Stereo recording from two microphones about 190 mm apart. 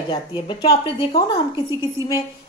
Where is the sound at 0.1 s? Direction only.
25° left (ahead or behind).